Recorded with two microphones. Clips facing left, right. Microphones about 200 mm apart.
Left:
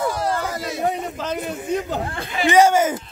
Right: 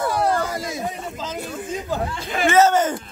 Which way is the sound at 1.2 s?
65° left (ahead or behind).